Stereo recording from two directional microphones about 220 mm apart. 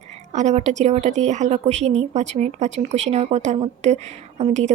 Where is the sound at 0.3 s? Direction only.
30° right (ahead or behind).